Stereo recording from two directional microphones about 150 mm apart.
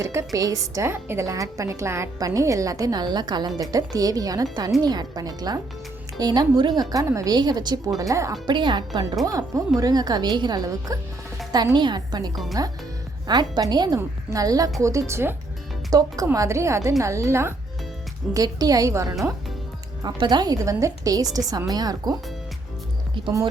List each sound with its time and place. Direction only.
0.0 s a woman's voice: 20° right (ahead or behind)
23.2 s music: 35° right (ahead or behind)